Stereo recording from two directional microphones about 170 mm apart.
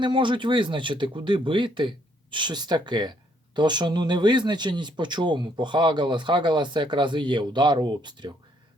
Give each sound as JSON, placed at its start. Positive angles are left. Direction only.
{"t": 0.0, "sound": "speech", "side_deg": -30}